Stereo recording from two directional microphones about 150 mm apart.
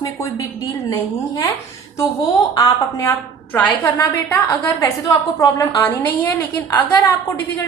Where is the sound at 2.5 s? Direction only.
20° left (ahead or behind).